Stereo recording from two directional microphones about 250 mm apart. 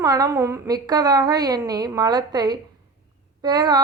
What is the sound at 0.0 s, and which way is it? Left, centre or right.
A woman's voice, centre.